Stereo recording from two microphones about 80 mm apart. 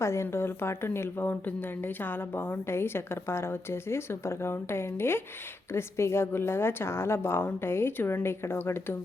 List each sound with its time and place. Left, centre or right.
0.0 s a woman's voice: left